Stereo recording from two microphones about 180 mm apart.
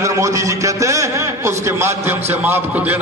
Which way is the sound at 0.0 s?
15° right (ahead or behind).